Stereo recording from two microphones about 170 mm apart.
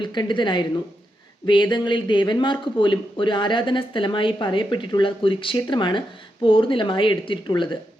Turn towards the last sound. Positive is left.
turn(degrees=30)  # may be behind; listen again after turning